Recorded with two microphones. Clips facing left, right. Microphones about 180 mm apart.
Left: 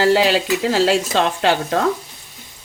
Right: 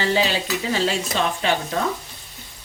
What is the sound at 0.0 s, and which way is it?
Speech, 80° left.